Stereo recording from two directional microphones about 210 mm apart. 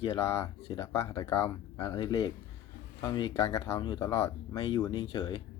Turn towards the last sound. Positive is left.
turn(degrees=20)  # may be behind; listen again after turning